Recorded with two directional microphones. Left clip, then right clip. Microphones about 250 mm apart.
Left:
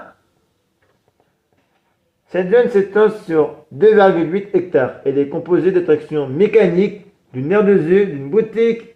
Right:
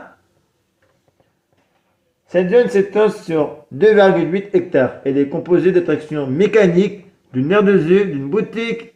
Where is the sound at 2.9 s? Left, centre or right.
Right.